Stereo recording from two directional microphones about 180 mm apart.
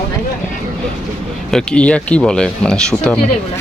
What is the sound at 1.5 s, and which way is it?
Speech, 5° left (ahead or behind).